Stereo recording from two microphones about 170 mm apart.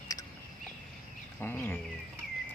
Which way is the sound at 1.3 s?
10° left (ahead or behind).